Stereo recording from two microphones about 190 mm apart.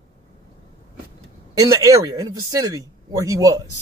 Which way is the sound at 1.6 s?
15° right (ahead or behind).